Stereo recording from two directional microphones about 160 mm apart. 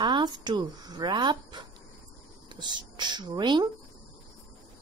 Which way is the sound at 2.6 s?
30° right (ahead or behind).